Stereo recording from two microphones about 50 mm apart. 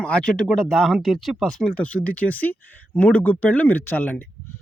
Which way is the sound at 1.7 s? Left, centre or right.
Left.